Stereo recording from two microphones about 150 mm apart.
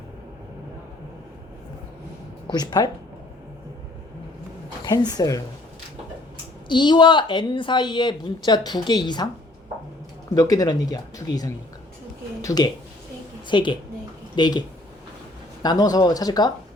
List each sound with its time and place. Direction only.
2.5 s speech: 30° left (ahead or behind)
4.9 s speech: 25° left (ahead or behind)
6.7 s a woman's voice: 30° left (ahead or behind)
10.3 s a woman's voice: 25° left (ahead or behind)
15.6 s speech: 25° left (ahead or behind)